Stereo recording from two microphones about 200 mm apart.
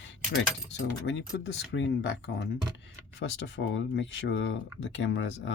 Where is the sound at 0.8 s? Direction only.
65° left (ahead or behind).